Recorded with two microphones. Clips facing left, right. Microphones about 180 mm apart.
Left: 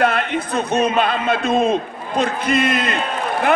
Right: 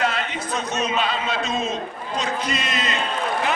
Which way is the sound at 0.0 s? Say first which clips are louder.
Left 6 dB; 55° left (ahead or behind).